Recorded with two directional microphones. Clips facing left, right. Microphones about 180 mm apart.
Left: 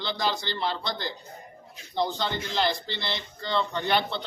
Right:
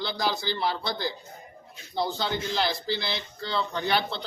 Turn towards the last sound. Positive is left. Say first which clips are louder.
# left 1 dB
turn(degrees=0)  # may be behind; listen again after turning